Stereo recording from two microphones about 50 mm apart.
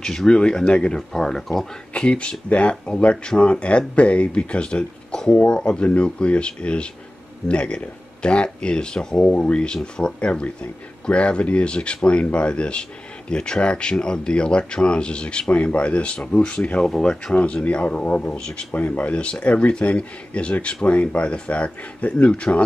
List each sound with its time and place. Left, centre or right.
0.0 s speech: centre
0.9 s speech: centre
2.0 s speech: left
16.8 s speech: centre
18.7 s speech: left